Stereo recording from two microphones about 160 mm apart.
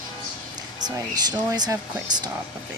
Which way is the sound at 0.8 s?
25° right (ahead or behind).